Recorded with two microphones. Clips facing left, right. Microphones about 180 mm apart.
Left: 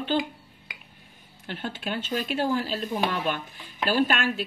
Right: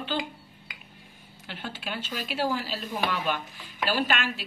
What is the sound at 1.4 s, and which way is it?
Speech, 50° left (ahead or behind).